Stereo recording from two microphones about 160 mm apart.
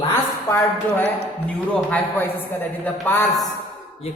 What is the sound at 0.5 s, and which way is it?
Speech, 10° left (ahead or behind).